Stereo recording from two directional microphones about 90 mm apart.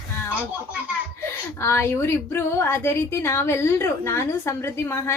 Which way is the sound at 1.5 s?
30° left (ahead or behind).